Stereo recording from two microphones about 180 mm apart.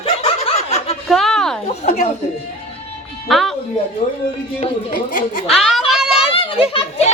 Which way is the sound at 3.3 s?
Centre (ahead or behind).